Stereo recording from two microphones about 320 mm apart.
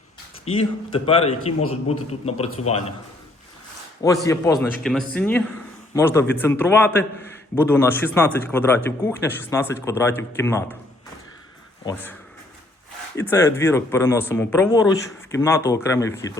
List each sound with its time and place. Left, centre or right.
0.5 s a man's voice: centre
4.0 s speech: centre
4.5 s a man's voice: centre
13.1 s speech: centre